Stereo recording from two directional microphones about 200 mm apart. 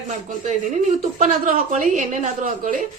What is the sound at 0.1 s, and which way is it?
A woman's voice, 35° right (ahead or behind).